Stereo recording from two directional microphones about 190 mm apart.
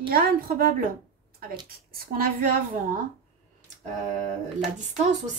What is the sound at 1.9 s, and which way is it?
Speech, 50° right (ahead or behind).